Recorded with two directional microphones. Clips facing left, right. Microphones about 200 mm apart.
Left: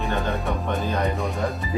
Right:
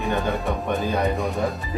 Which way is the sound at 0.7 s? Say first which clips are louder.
Right 2 dB; 15° right (ahead or behind).